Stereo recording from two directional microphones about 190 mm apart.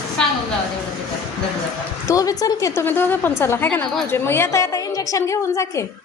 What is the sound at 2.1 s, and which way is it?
A woman's voice, 20° left (ahead or behind).